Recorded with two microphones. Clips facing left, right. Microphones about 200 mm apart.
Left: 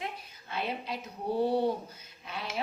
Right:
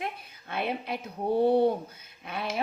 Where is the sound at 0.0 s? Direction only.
55° right (ahead or behind).